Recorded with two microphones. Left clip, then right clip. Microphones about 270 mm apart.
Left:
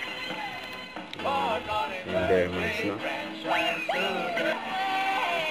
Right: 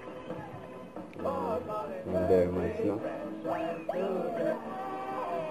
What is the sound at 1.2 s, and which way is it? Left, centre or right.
Music, centre.